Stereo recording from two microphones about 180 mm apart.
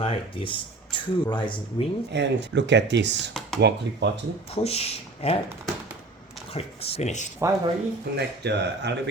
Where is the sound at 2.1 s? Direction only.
75° right (ahead or behind).